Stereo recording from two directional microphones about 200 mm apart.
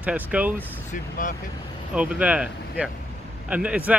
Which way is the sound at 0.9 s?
40° left (ahead or behind).